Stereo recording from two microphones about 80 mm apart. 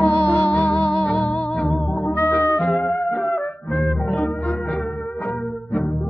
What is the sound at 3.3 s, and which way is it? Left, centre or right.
Music, centre.